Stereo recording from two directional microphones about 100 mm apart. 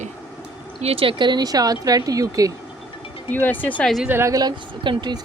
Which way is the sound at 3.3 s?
20° left (ahead or behind).